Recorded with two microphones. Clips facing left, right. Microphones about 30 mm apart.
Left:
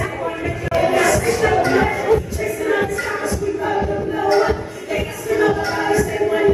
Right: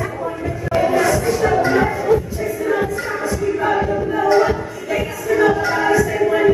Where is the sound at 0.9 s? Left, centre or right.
Left.